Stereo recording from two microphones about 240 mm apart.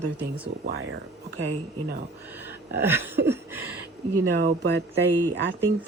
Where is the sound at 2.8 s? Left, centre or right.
Centre.